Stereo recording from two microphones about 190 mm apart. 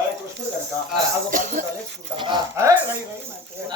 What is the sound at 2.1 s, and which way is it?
Speech, 25° right (ahead or behind).